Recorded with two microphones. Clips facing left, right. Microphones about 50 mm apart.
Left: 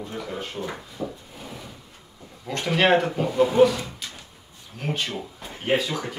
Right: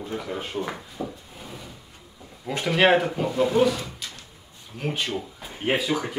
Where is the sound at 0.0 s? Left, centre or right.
Centre.